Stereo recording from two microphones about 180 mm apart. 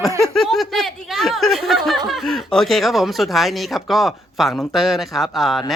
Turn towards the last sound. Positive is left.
turn(degrees=0)  # may be behind; listen again after turning